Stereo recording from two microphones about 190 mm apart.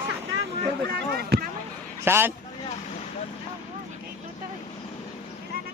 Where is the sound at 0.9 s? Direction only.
55° right (ahead or behind).